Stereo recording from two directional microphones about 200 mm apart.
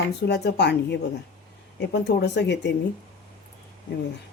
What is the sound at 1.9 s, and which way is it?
Speech, 55° left (ahead or behind).